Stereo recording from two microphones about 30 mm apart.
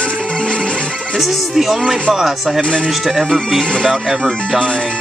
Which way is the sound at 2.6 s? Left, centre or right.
Left.